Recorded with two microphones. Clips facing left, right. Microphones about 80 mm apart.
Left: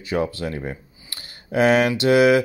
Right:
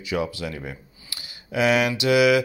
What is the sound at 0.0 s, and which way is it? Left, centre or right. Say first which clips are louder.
A man's voice: left 3 dB; left.